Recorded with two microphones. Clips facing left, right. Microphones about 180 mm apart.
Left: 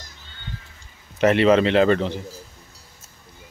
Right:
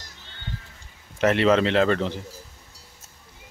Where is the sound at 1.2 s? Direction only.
Centre (ahead or behind).